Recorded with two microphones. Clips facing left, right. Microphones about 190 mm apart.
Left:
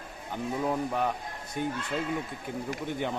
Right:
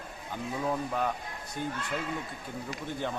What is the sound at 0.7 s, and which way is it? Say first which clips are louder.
Speech: left 1 dB; 15° left (ahead or behind).